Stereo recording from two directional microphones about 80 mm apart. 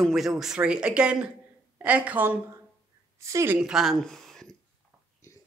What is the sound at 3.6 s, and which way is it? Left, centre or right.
Speech, centre.